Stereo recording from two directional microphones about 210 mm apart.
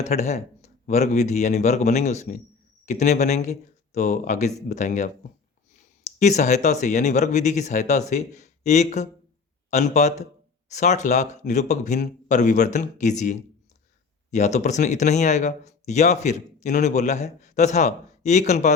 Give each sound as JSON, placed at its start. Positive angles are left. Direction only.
{"t": 0.0, "sound": "speech", "side_deg": 35}
{"t": 6.1, "sound": "speech", "side_deg": 35}